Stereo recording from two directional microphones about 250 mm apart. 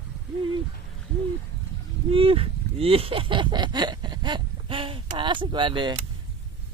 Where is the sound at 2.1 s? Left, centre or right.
Right.